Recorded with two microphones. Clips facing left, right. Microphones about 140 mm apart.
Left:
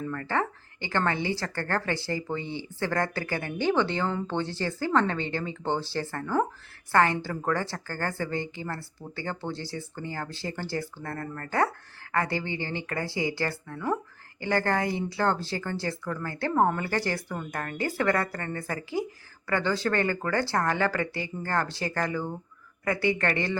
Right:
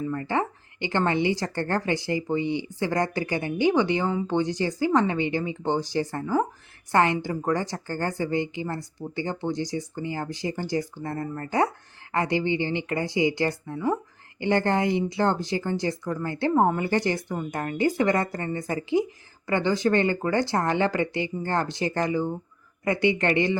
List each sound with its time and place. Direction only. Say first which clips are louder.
0.1 s a woman's voice: right 3 dB; 15° right (ahead or behind)